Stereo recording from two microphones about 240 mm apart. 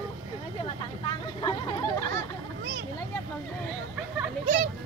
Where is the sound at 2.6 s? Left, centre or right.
Right.